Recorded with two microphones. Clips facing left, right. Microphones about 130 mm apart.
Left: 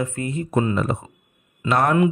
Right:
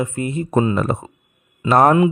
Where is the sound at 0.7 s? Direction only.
50° right (ahead or behind).